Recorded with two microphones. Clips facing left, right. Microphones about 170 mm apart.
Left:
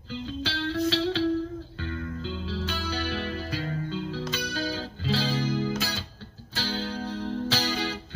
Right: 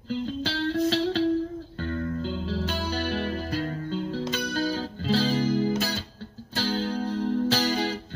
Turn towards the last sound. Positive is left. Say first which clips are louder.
# right 4 dB
turn(degrees=-45)  # may be behind; listen again after turning